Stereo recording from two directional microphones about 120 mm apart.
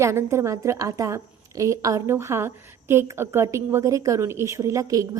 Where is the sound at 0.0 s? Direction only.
20° right (ahead or behind).